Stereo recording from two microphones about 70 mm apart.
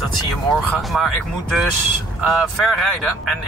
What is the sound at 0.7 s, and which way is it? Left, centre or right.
Speech, centre.